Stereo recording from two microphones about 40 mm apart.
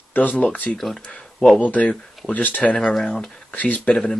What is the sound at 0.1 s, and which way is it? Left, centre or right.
Speech, left.